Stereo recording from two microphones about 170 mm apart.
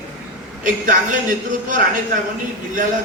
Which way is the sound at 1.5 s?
50° right (ahead or behind).